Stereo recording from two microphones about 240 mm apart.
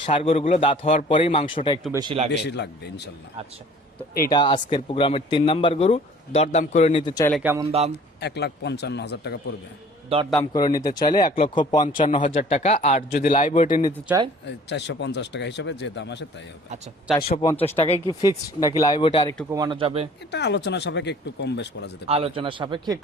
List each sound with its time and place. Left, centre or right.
0.0 s a man's voice: left
1.9 s speech: centre
2.3 s speech: left
4.3 s a man's voice: centre
7.3 s speech: centre
8.2 s speech: left
10.1 s speech: right
10.5 s speech: centre
11.2 s a man's voice: left
14.4 s speech: left
17.8 s speech: left
19.5 s speech: centre
20.3 s speech: left
22.0 s speech: right